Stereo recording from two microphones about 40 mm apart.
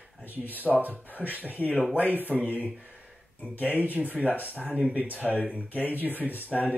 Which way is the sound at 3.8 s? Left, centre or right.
Right.